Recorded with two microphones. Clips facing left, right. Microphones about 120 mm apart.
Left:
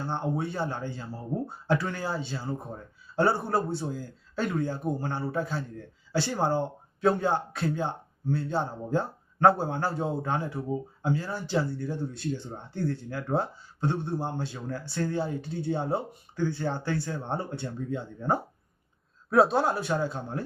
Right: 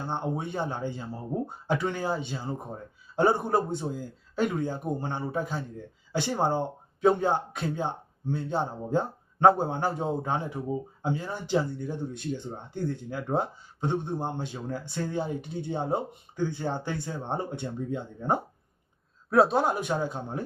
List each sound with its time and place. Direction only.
0.0 s a man's voice: 15° right (ahead or behind)
19.3 s a man's voice: centre (ahead or behind)
19.6 s a man's voice: 15° right (ahead or behind)